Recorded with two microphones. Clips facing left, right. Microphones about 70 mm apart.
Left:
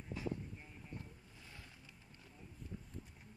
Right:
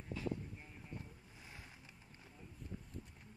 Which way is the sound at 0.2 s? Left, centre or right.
Centre.